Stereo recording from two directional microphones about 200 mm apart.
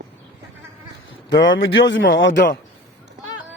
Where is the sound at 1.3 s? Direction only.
65° left (ahead or behind).